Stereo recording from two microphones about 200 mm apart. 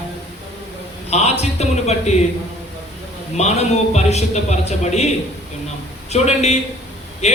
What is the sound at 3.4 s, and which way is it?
A man's voice, 35° left (ahead or behind).